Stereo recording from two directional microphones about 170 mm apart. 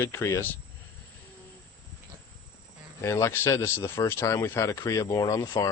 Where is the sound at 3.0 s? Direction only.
15° left (ahead or behind).